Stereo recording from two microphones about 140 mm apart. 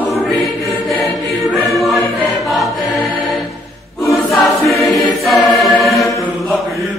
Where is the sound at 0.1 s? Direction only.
Centre (ahead or behind).